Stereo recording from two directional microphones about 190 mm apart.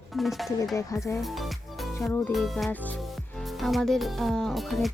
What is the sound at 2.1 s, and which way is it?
Speech, 5° left (ahead or behind).